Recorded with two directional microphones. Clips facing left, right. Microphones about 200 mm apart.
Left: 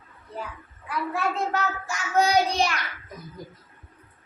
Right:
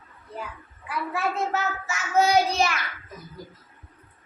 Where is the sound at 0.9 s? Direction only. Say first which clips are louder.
Left 1 dB; 5° right (ahead or behind).